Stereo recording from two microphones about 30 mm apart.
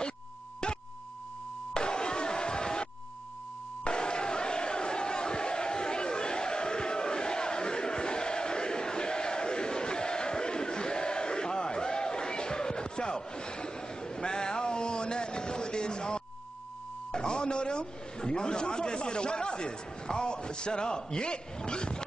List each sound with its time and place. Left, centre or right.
1.7 s music: left
3.8 s crowd: left
17.1 s a man's voice: left